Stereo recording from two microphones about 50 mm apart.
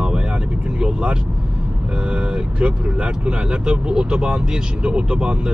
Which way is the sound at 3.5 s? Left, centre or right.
Centre.